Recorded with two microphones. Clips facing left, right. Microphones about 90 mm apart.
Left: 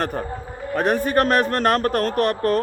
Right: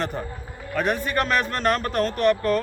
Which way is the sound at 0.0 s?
45° left (ahead or behind).